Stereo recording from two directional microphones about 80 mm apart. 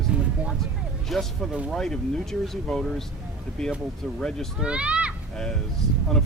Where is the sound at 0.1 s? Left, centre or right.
Centre.